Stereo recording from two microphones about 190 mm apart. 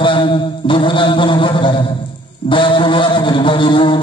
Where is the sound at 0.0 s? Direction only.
25° left (ahead or behind).